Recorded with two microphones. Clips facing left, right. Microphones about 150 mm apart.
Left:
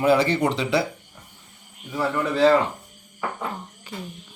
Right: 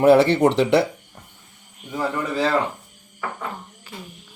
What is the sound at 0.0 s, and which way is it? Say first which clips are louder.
Speech: right 5 dB; 65° right (ahead or behind).